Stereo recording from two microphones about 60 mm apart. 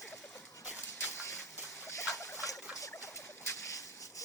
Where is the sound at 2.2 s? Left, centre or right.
Left.